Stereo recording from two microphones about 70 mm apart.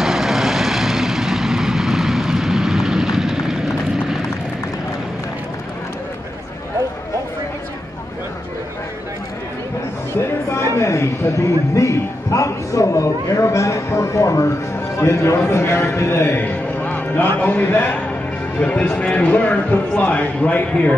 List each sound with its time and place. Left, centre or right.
0.0 s vehicle: centre
10.5 s a man's voice: left; by 20.9 s centre